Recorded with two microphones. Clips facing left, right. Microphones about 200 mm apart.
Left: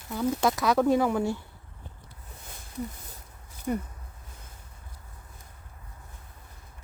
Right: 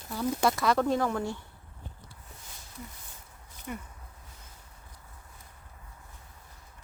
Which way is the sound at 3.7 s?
40° left (ahead or behind).